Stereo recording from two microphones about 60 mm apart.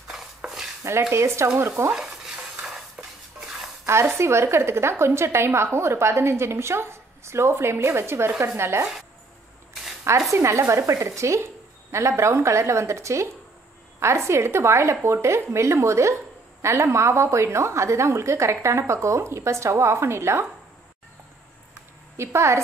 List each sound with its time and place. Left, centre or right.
0.1 s cutlery: centre
1.1 s a woman's voice: right
2.5 s stir: centre
3.8 s a woman's voice: right
10.3 s a woman's voice: right
22.1 s a woman's voice: right